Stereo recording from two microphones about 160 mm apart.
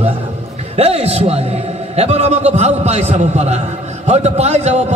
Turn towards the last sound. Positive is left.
turn(degrees=-45)  # may be behind; listen again after turning